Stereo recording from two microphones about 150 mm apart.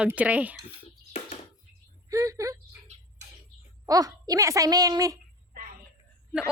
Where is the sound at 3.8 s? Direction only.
25° right (ahead or behind).